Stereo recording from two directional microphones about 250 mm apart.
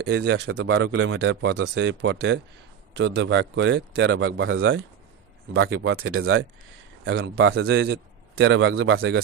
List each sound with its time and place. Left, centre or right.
0.0 s speech: right
7.1 s speech: right